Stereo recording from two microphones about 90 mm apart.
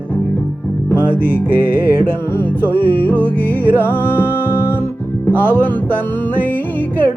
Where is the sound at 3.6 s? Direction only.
20° right (ahead or behind).